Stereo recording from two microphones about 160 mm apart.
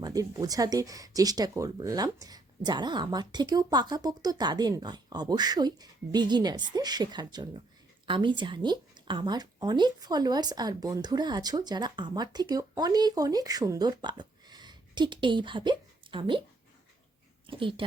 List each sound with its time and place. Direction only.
0.0 s speech: 20° right (ahead or behind)
17.4 s speech: 30° right (ahead or behind)